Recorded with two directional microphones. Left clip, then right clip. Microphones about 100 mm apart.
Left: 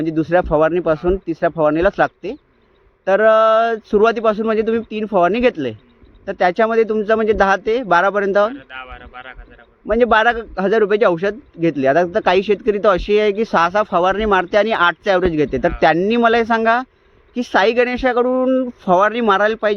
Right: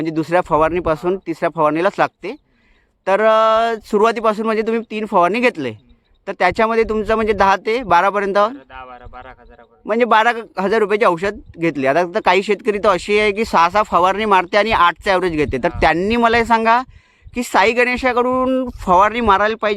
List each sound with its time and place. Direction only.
0.0 s speech: 35° right (ahead or behind)
3.1 s a man's voice: 35° right (ahead or behind)